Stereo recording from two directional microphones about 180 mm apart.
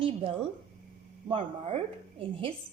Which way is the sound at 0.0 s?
30° right (ahead or behind).